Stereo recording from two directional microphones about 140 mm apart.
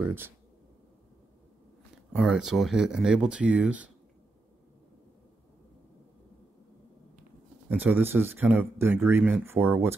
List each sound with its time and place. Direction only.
0.0 s speech: 15° right (ahead or behind)
2.1 s speech: centre (ahead or behind)
7.7 s speech: 10° right (ahead or behind)